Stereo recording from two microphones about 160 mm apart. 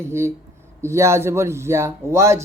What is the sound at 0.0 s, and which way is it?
Speech, 15° right (ahead or behind).